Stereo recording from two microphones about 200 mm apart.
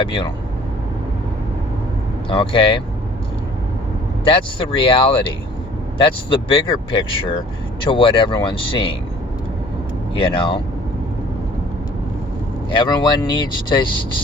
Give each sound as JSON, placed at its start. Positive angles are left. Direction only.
{"t": 0.0, "sound": "speech", "side_deg": 25}
{"t": 2.3, "sound": "speech", "side_deg": 25}
{"t": 4.3, "sound": "speech", "side_deg": 25}
{"t": 6.3, "sound": "speech", "side_deg": 25}
{"t": 10.2, "sound": "speech", "side_deg": 25}
{"t": 12.7, "sound": "speech", "side_deg": 25}